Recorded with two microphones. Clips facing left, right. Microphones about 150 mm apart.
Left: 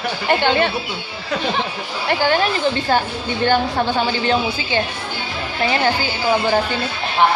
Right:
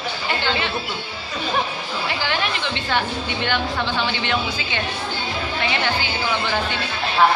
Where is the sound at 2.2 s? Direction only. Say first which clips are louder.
Left 11 dB; 40° left (ahead or behind).